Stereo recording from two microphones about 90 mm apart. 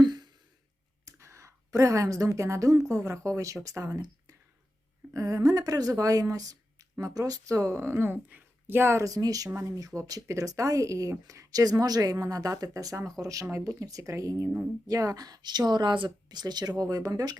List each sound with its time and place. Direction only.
0.0 s a sound: 55° right (ahead or behind)
1.0 s a woman's voice: 35° right (ahead or behind)
5.1 s speech: 40° right (ahead or behind)
9.0 s speech: 40° right (ahead or behind)